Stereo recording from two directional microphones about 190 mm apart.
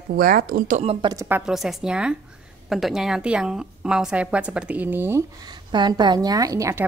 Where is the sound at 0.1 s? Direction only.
50° right (ahead or behind).